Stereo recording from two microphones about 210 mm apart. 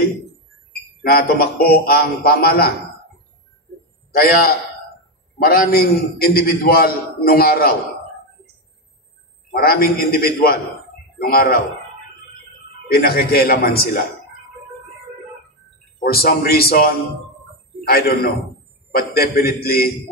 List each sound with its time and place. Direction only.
1.0 s a man's voice: 45° left (ahead or behind)
4.1 s a man's voice: 45° left (ahead or behind)
9.5 s a man's voice: 45° left (ahead or behind)
12.8 s a man's voice: 45° left (ahead or behind)
16.0 s a man's voice: 45° left (ahead or behind)